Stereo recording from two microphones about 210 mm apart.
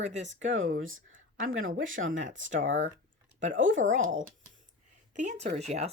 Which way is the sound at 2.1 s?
35° right (ahead or behind).